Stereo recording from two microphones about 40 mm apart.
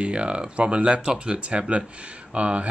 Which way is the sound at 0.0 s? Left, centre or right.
Right.